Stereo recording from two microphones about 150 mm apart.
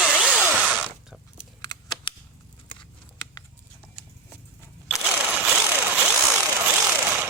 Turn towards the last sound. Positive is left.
turn(degrees=-15)  # may be behind; listen again after turning